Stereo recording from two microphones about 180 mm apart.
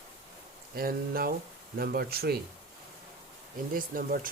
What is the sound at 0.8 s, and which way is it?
Speech, 55° right (ahead or behind).